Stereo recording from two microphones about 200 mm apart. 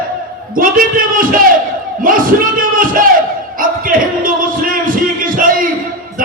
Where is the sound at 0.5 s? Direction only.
45° right (ahead or behind).